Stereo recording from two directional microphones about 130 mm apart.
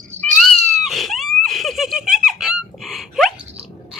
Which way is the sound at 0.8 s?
Centre (ahead or behind).